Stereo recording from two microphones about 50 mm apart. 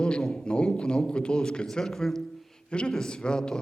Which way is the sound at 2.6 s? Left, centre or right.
Left.